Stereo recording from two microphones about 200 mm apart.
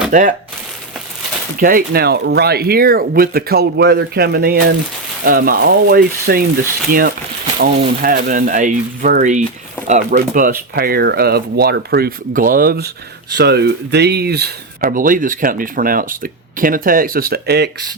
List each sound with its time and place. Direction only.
0.1 s speech: 40° right (ahead or behind)
1.5 s speech: 45° right (ahead or behind)